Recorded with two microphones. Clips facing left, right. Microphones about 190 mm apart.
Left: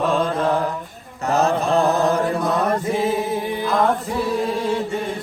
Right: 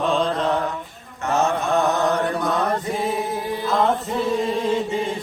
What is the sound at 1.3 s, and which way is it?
Mantra, 35° left (ahead or behind).